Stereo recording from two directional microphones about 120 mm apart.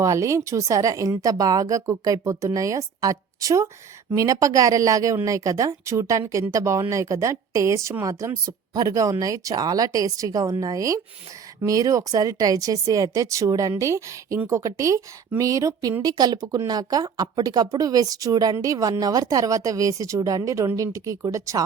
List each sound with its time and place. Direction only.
0.0 s speech: 25° right (ahead or behind)